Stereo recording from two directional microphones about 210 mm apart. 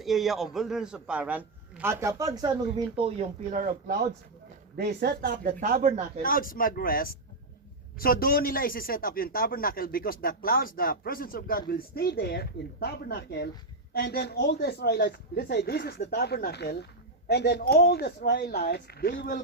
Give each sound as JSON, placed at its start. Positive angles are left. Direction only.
{"t": 0.0, "sound": "a man's voice", "side_deg": 0}
{"t": 4.8, "sound": "speech", "side_deg": -50}
{"t": 6.2, "sound": "speech", "side_deg": 40}